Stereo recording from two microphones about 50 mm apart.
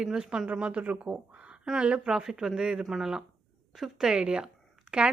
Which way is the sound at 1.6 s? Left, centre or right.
Centre.